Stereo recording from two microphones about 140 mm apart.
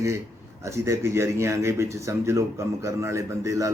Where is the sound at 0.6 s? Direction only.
20° right (ahead or behind).